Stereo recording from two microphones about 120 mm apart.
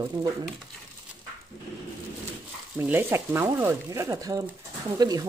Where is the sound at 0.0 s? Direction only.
35° right (ahead or behind).